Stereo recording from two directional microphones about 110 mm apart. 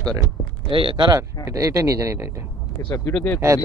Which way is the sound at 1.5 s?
25° right (ahead or behind).